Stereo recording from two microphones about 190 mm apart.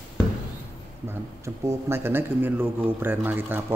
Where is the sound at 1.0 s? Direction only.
15° right (ahead or behind).